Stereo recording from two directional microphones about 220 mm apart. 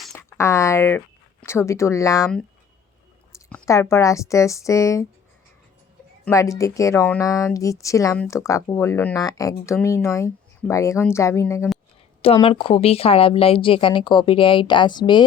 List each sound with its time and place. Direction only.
0.0 s speech: 5° left (ahead or behind)
3.5 s a woman's voice: 10° left (ahead or behind)
6.2 s a woman's voice: 15° left (ahead or behind)
12.2 s speech: 25° left (ahead or behind)